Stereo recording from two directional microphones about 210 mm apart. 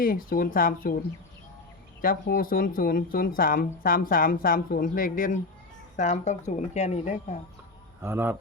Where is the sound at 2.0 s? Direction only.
45° left (ahead or behind).